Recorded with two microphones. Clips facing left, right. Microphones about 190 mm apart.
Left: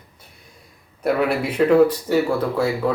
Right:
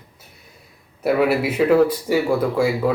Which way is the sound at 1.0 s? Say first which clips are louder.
Right 2 dB; 5° right (ahead or behind).